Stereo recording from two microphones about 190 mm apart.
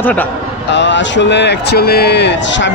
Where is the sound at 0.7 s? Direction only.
70° left (ahead or behind).